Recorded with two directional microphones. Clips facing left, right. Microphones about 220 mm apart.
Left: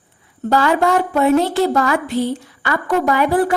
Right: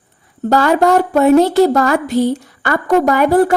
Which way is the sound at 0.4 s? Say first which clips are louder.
Right 3 dB; 40° right (ahead or behind).